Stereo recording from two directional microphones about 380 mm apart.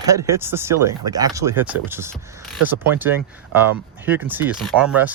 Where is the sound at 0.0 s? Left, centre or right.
Centre.